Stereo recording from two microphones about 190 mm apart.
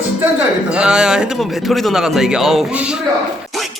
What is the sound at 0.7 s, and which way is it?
Speech, 5° right (ahead or behind).